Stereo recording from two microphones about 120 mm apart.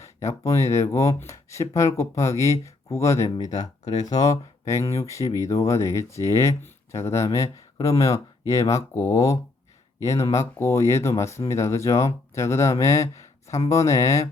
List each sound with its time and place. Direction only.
0.0 s speech: 25° left (ahead or behind)
3.2 s speech: 35° left (ahead or behind)